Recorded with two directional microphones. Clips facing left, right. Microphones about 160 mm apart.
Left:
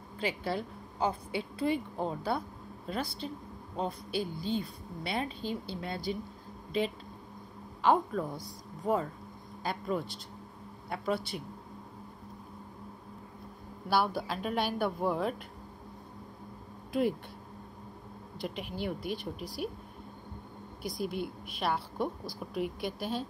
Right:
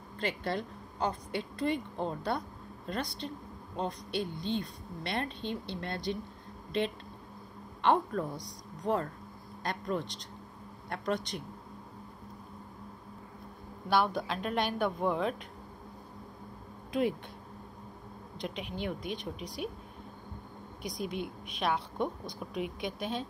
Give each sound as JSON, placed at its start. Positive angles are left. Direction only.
{"t": 0.2, "sound": "a woman's voice", "side_deg": 10}
{"t": 7.8, "sound": "a woman's voice", "side_deg": 5}
{"t": 13.8, "sound": "a woman's voice", "side_deg": 5}
{"t": 18.4, "sound": "a woman's voice", "side_deg": 5}
{"t": 20.8, "sound": "a woman's voice", "side_deg": 5}